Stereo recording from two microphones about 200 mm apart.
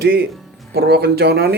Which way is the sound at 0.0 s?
50° right (ahead or behind).